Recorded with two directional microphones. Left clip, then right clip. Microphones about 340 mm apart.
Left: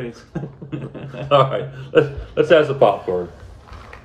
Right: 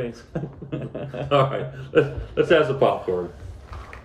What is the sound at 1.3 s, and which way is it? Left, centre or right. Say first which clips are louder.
Speech: left 5 dB; centre.